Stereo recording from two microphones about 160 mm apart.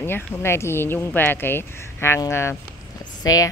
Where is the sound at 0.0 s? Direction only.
15° left (ahead or behind).